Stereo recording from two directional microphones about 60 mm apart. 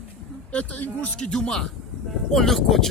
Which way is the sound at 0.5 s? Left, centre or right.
Left.